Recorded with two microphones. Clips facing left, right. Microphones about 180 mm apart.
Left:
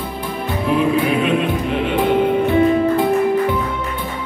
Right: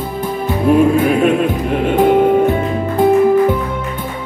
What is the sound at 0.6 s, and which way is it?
Music, 45° right (ahead or behind).